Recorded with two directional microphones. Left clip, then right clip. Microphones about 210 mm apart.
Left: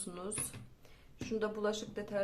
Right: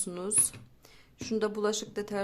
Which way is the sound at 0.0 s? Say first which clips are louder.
Right 8 dB; 40° right (ahead or behind).